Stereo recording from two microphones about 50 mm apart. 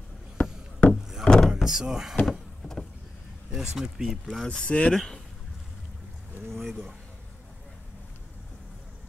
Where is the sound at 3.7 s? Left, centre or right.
Centre.